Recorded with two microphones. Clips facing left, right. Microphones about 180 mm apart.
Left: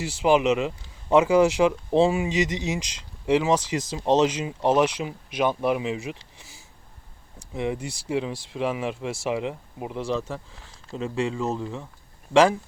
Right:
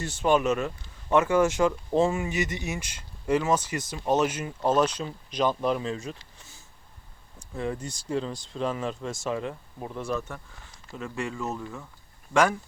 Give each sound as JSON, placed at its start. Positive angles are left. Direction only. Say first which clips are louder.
{"t": 0.2, "sound": "speech", "louder": "left 3 dB", "side_deg": 10}
{"t": 2.3, "sound": "speech", "louder": "left 5 dB", "side_deg": 90}
{"t": 3.2, "sound": "speech", "louder": "left 3 dB", "side_deg": 15}
{"t": 7.3, "sound": "speech", "louder": "left 3 dB", "side_deg": 15}